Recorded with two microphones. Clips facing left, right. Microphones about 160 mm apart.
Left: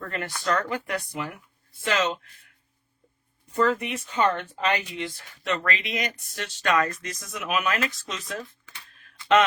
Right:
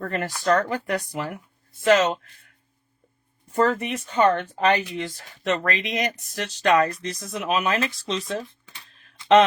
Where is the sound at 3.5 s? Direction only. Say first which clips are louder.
Right 2 dB; 45° right (ahead or behind).